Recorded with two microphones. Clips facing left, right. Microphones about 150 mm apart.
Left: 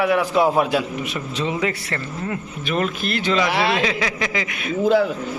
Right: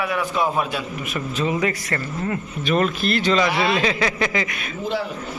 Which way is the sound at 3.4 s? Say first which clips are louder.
Even; 70° left (ahead or behind).